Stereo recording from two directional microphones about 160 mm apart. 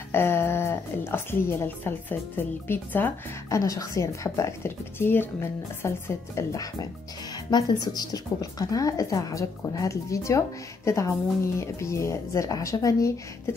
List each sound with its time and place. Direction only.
0.1 s a woman's voice: 15° left (ahead or behind)